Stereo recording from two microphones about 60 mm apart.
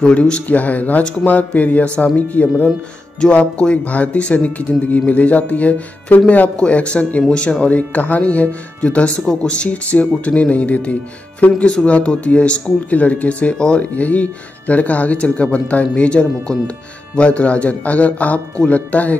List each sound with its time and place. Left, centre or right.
0.0 s speech: centre